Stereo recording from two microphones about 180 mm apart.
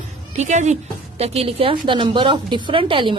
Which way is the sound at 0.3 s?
40° right (ahead or behind).